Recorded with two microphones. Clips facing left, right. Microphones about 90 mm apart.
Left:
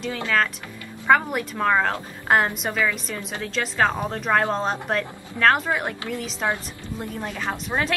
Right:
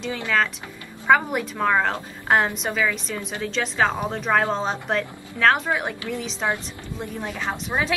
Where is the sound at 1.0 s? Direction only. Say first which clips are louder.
Even; centre (ahead or behind).